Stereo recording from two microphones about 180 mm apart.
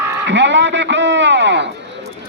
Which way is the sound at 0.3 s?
80° right.